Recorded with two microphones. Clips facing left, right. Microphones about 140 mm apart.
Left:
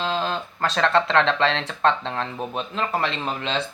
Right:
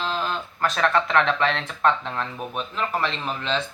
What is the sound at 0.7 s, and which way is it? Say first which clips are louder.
Speech: left 2 dB; 70° left (ahead or behind).